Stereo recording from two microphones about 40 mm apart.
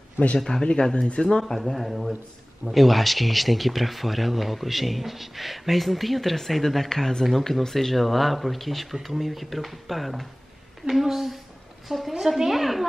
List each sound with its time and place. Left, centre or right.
0.4 s speech: centre
1.4 s a woman's voice: centre